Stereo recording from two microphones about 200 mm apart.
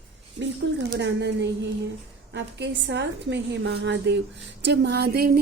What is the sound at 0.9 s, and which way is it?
A woman's voice, 60° right (ahead or behind).